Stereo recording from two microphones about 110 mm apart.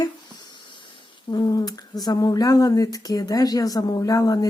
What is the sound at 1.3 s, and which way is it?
Speech, 40° left (ahead or behind).